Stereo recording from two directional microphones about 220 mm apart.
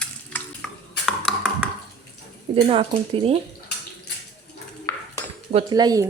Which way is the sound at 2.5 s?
25° right (ahead or behind).